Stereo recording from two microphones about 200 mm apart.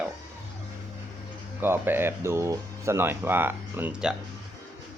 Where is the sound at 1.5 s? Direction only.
10° right (ahead or behind).